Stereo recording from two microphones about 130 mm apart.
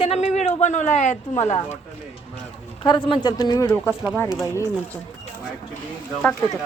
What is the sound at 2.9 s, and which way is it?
Speech, 40° left (ahead or behind).